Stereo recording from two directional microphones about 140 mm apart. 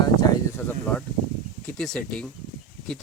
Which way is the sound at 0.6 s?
20° left (ahead or behind).